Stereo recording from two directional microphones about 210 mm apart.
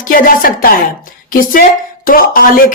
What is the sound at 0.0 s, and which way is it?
A woman's voice, 40° left (ahead or behind).